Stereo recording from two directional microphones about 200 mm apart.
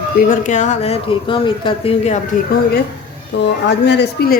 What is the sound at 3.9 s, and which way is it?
Speech, 55° left (ahead or behind).